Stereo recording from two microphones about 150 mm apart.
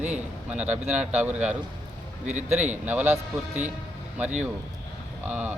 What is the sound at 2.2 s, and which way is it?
Speech, 50° right (ahead or behind).